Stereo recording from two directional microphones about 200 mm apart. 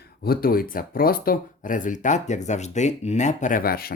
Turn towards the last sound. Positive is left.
turn(degrees=50)  # may be behind; listen again after turning